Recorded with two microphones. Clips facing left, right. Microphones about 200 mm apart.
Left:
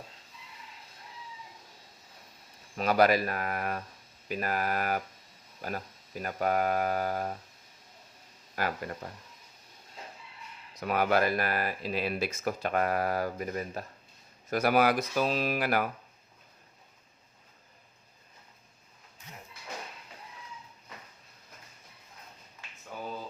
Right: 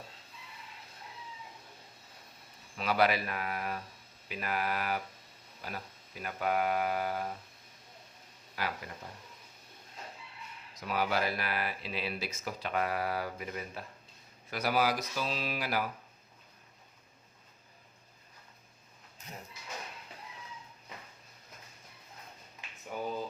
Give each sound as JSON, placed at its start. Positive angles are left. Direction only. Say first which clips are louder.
{"t": 2.7, "sound": "speech", "louder": "left 5 dB", "side_deg": 45}
{"t": 8.5, "sound": "speech", "louder": "left 5 dB", "side_deg": 50}
{"t": 10.8, "sound": "speech", "louder": "left 5 dB", "side_deg": 55}
{"t": 14.5, "sound": "speech", "louder": "left 5 dB", "side_deg": 55}
{"t": 22.9, "sound": "a sound", "louder": "right 3 dB", "side_deg": -15}